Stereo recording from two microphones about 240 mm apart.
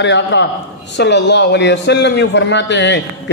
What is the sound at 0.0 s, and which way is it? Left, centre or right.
A man's voice, left.